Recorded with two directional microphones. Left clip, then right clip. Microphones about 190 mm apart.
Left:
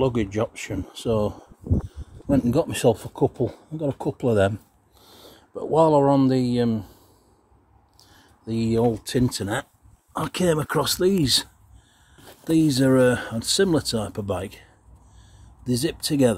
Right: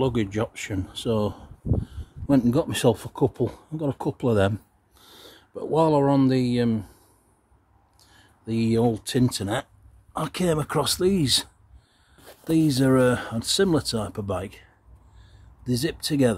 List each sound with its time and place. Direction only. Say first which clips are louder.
0.0 s speech: left 2 dB; 5° right (ahead or behind)
2.2 s a man's voice: even; 25° right (ahead or behind)
8.0 s a sound: left 2 dB; 30° right (ahead or behind)
8.5 s speech: left 1 dB; 15° right (ahead or behind)
10.1 s speech: left 2 dB; 5° left (ahead or behind)